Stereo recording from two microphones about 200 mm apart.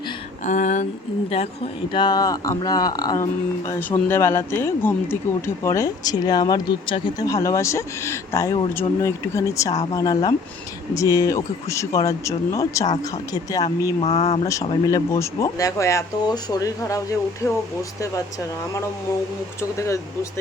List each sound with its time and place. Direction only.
0.4 s speech: 40° left (ahead or behind); by 13.7 s 15° left (ahead or behind)
14.0 s speech: 30° left (ahead or behind)
14.4 s speech: 15° left (ahead or behind)